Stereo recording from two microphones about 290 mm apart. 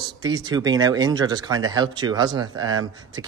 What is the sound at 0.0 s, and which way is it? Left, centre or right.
Speech, centre.